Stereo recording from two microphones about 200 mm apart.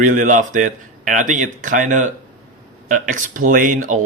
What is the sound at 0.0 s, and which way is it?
Speech, 40° right (ahead or behind).